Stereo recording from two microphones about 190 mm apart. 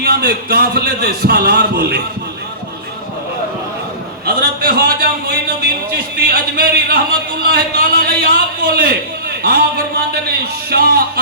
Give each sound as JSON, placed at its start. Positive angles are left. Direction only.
{"t": 0.0, "sound": "a man's voice", "side_deg": -60}
{"t": 4.4, "sound": "a man's voice", "side_deg": -55}